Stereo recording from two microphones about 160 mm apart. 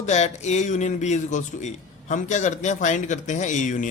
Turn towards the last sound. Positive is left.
turn(degrees=50)  # may be behind; listen again after turning